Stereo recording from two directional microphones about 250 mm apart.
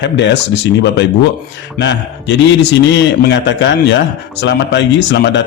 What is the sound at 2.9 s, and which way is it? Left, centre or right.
A man's voice, left.